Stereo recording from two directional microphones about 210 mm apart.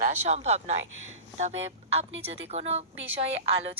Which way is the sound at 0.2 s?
35° right (ahead or behind).